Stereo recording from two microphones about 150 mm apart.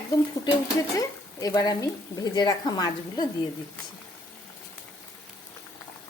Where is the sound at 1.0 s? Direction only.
25° left (ahead or behind).